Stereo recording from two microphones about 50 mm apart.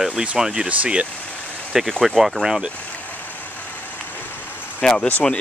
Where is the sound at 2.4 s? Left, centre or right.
Centre.